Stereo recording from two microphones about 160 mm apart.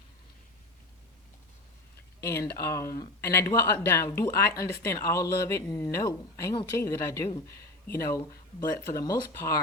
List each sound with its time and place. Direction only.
2.2 s speech: 20° left (ahead or behind)